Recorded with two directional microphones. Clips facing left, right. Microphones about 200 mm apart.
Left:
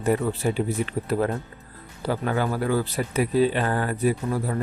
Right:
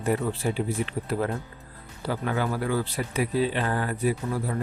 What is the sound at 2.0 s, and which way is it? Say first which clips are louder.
Speech: left 3 dB; 45° left (ahead or behind).